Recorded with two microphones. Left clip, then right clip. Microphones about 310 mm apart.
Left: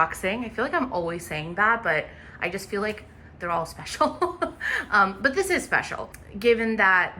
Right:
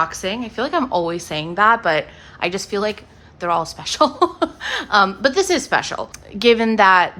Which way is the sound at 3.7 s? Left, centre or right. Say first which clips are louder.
Right 8 dB; centre.